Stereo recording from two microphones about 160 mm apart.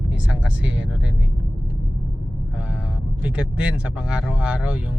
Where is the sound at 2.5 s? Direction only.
5° right (ahead or behind).